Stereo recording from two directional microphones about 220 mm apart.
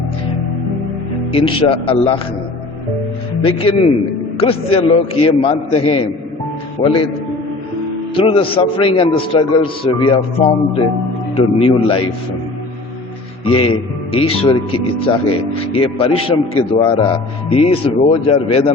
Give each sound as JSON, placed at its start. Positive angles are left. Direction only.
{"t": 1.3, "sound": "speech", "side_deg": 25}
{"t": 3.4, "sound": "speech", "side_deg": 25}
{"t": 6.8, "sound": "speech", "side_deg": 20}
{"t": 8.1, "sound": "speech", "side_deg": 25}
{"t": 13.4, "sound": "speech", "side_deg": 25}